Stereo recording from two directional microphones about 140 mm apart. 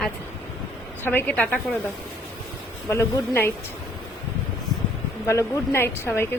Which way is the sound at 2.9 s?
20° left (ahead or behind).